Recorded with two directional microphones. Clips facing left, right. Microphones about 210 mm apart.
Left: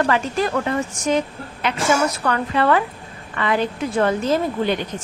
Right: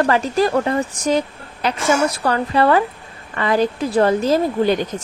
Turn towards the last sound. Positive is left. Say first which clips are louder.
# right 3 dB
turn(degrees=-35)  # may be behind; listen again after turning